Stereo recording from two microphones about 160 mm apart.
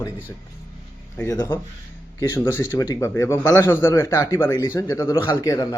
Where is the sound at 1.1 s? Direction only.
15° left (ahead or behind).